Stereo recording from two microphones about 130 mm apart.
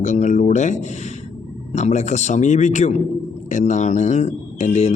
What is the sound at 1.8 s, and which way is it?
Speech, 60° left (ahead or behind).